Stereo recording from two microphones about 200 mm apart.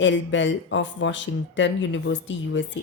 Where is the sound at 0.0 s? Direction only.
65° left (ahead or behind).